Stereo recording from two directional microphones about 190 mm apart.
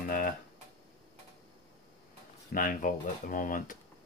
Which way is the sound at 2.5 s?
45° left (ahead or behind).